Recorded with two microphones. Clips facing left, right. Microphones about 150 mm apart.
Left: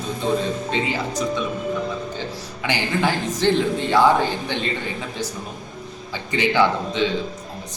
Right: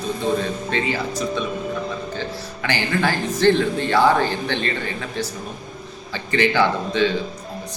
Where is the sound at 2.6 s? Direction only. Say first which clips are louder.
Even; 15° left (ahead or behind).